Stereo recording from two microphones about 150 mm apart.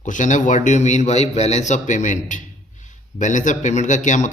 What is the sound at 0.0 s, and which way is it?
A man's voice, 55° left (ahead or behind).